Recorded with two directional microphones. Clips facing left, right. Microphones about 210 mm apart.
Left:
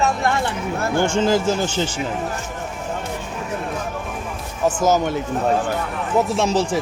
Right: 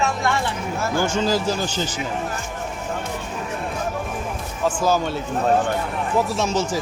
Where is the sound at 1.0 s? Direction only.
20° left (ahead or behind).